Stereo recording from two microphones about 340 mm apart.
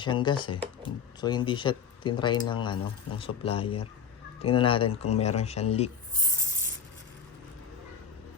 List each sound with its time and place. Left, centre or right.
0.0 s speech: centre